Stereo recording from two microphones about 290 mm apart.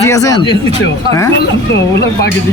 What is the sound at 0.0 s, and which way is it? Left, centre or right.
Speech, centre.